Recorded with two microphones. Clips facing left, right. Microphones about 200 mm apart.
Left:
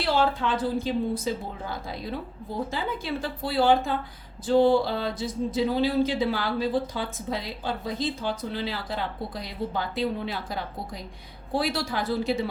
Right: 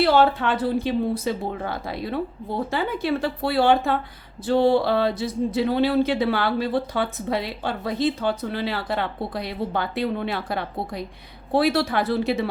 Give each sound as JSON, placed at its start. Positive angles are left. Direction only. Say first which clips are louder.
{"t": 0.0, "sound": "speech", "louder": "right 6 dB", "side_deg": -65}